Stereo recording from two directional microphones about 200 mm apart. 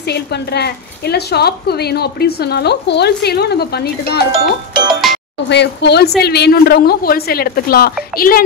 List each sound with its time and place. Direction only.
0.1 s a woman's voice: 55° left (ahead or behind)
5.1 s music: centre (ahead or behind)
5.5 s a woman's voice: 60° left (ahead or behind)